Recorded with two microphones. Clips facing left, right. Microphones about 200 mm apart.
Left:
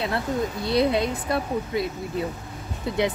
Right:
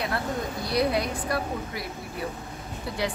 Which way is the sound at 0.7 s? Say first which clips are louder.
Left 3 dB; 25° left (ahead or behind).